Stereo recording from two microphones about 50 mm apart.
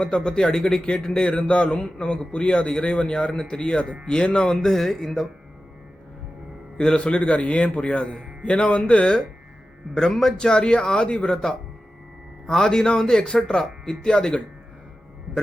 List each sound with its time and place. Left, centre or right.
0.0 s a man's voice: centre
6.7 s a man's voice: centre
9.9 s speech: centre
12.5 s speech: centre